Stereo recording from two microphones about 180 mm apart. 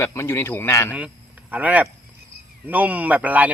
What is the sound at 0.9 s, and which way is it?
Speech, 10° right (ahead or behind).